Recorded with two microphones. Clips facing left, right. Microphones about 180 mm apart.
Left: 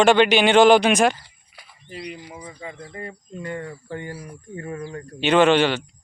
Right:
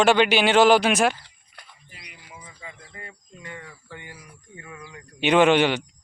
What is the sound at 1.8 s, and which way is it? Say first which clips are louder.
Speech: left 18 dB; 30° left (ahead or behind).